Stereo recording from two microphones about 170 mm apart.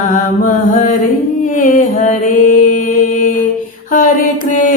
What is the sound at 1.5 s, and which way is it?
Mantra, 50° left (ahead or behind).